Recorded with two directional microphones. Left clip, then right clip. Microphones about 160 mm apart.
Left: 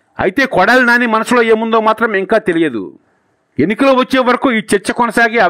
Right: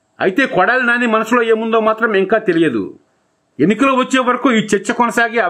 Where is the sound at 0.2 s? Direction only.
50° left (ahead or behind).